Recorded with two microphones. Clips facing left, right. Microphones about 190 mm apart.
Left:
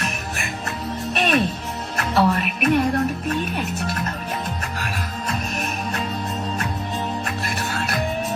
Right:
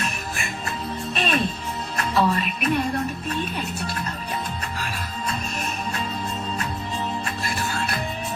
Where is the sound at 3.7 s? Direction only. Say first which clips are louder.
Left 3 dB; 45° left (ahead or behind).